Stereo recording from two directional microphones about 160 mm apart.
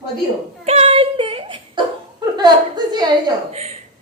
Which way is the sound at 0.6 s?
35° right (ahead or behind).